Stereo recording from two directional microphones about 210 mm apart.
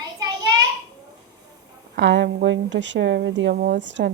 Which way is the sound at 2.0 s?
60° right (ahead or behind).